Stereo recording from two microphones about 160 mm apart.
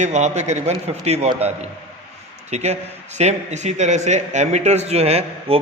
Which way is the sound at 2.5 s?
45° right (ahead or behind).